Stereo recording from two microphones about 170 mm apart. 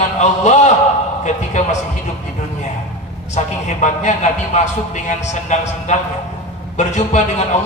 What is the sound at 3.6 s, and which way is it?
A man's voice, 45° left (ahead or behind).